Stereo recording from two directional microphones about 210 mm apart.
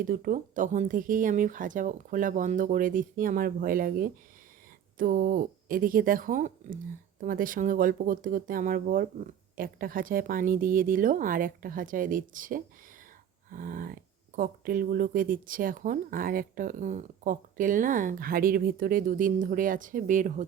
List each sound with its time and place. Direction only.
0.0 s speech: 40° right (ahead or behind)